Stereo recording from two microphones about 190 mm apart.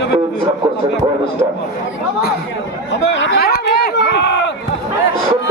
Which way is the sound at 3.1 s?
70° left (ahead or behind).